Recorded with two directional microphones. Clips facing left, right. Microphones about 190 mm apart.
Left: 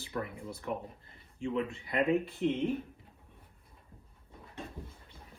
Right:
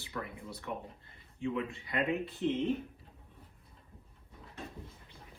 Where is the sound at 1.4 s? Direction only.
35° left (ahead or behind).